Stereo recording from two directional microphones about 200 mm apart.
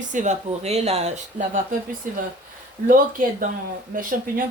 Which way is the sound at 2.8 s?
45° right (ahead or behind).